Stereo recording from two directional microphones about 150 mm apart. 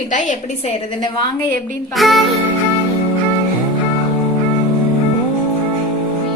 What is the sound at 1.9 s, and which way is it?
Music, centre (ahead or behind).